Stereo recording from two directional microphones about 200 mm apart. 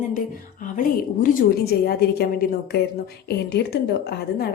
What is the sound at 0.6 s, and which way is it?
A woman's voice, 40° left (ahead or behind).